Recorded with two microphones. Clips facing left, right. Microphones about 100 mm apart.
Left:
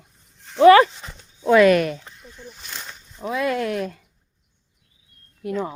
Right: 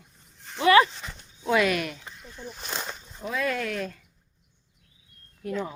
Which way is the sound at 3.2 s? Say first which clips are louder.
Left 5 dB; 20° left (ahead or behind).